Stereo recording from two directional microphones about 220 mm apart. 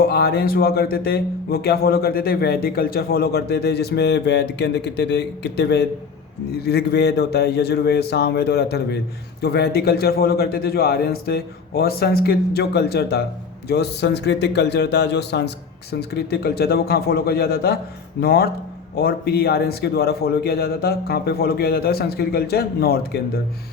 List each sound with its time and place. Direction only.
0.1 s speech: 45° left (ahead or behind)